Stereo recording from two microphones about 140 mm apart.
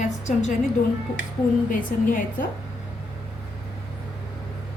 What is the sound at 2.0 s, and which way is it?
Speech, 80° left.